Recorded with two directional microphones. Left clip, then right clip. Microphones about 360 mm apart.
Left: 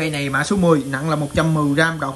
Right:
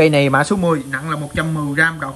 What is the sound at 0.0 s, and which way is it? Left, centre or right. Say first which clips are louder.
A man's voice: right 8 dB; centre.